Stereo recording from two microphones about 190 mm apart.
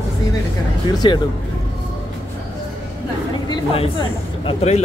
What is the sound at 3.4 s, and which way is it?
Speech, 25° left (ahead or behind).